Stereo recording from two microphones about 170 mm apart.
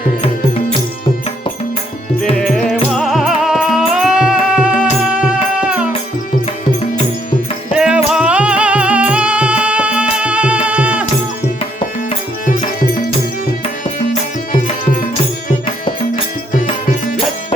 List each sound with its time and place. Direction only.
2.9 s music: centre (ahead or behind)
7.8 s music: 5° right (ahead or behind)
14.1 s music: 50° left (ahead or behind)